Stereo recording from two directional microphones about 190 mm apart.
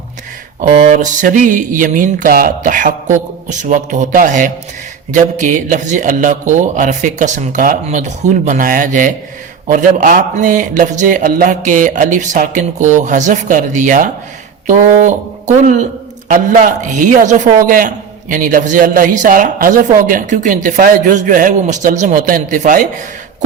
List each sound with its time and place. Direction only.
0.6 s a man's voice: 40° right (ahead or behind)